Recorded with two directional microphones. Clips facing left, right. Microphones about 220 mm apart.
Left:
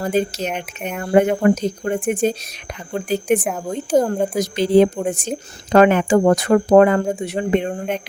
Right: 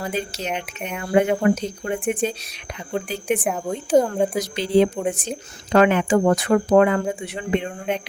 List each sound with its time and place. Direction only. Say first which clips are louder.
0.0 s speech: left 7 dB; 45° left (ahead or behind)
3.4 s speech: left 1 dB; centre (ahead or behind)
4.4 s speech: left 5 dB; 45° left (ahead or behind)